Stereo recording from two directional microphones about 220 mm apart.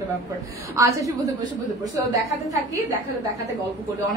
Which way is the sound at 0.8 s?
15° right (ahead or behind).